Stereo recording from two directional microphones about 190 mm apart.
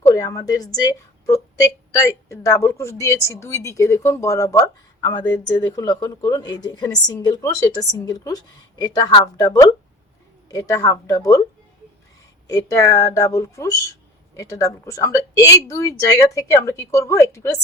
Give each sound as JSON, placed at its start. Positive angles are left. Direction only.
{"t": 0.1, "sound": "a woman's voice", "side_deg": 20}
{"t": 12.5, "sound": "a woman's voice", "side_deg": 20}